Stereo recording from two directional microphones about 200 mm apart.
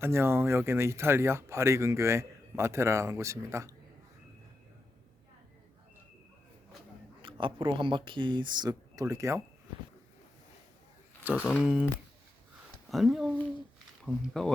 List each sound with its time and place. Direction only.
0.0 s speech: 10° right (ahead or behind)
7.2 s speech: 25° right (ahead or behind)
11.4 s speech: 5° right (ahead or behind)
12.9 s speech: centre (ahead or behind)